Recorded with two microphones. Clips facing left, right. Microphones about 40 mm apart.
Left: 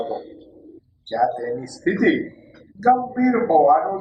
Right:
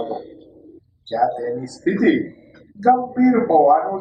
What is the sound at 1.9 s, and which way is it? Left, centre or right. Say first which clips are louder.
A man's voice: right 2 dB; centre.